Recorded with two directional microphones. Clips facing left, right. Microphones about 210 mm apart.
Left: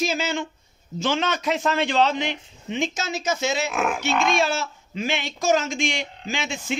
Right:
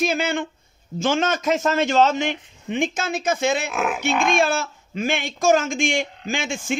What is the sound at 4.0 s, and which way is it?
A man's voice, 50° right (ahead or behind).